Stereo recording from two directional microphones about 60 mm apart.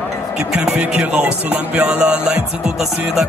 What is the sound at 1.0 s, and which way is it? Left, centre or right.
Music, right.